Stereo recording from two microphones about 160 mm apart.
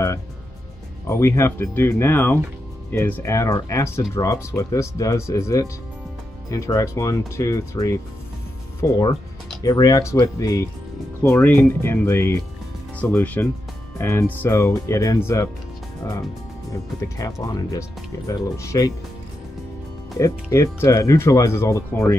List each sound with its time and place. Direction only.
1.0 s speech: 20° left (ahead or behind)
20.2 s speech: 20° left (ahead or behind)